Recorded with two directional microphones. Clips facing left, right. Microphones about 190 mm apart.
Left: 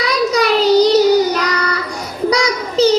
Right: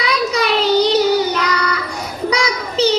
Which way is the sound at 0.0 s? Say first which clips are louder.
Left 3 dB; 35° left (ahead or behind).